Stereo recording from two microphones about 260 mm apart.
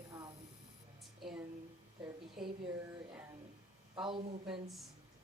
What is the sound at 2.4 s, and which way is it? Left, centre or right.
Speech, centre.